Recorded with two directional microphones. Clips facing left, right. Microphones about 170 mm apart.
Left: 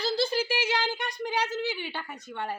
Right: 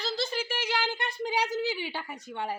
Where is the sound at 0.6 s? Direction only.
Centre (ahead or behind).